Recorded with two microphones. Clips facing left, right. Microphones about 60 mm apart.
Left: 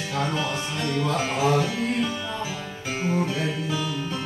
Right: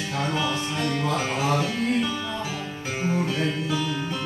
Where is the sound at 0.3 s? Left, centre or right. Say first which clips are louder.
Right 1 dB; right.